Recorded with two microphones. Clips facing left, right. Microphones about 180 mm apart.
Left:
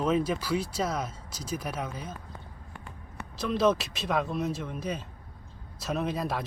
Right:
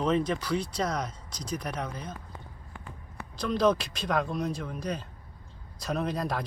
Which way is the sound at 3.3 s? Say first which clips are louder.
Even; 5° left (ahead or behind).